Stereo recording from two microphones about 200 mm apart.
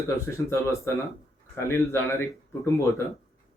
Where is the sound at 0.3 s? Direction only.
15° left (ahead or behind).